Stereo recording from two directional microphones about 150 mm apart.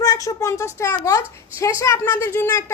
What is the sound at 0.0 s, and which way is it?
A woman's voice, 25° left (ahead or behind).